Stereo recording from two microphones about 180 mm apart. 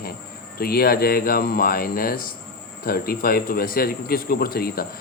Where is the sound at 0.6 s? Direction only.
60° left (ahead or behind).